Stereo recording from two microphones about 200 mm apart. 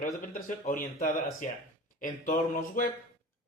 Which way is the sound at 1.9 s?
40° left (ahead or behind).